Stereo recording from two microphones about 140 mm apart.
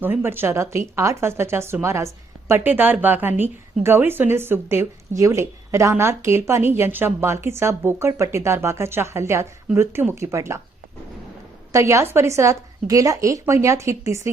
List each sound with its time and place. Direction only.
0.0 s speech: 15° right (ahead or behind)
11.7 s speech: 20° right (ahead or behind)